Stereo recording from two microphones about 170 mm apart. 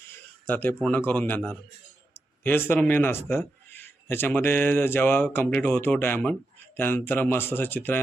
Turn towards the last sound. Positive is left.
turn(degrees=10)  # may be behind; listen again after turning